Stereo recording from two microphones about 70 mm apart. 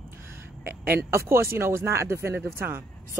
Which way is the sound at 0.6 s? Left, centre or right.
Right.